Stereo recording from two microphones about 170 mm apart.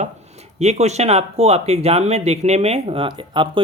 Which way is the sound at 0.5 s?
40° right (ahead or behind).